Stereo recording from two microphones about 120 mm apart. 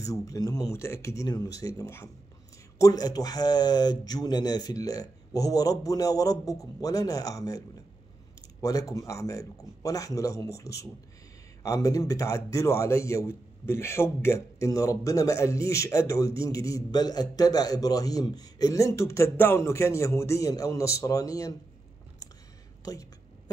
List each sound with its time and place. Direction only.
0.0 s a man's voice: 30° left (ahead or behind)